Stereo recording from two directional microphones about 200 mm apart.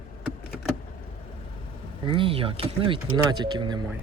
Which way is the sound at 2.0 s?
25° right (ahead or behind).